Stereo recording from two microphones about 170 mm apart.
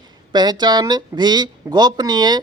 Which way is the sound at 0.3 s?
25° right (ahead or behind).